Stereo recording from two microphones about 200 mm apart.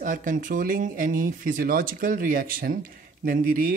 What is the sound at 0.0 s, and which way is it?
Speech, 40° right (ahead or behind).